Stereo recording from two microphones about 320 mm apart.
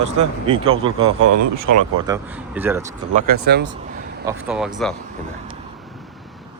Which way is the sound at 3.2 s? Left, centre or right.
Right.